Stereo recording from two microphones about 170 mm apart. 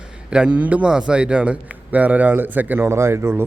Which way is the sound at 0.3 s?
5° right (ahead or behind).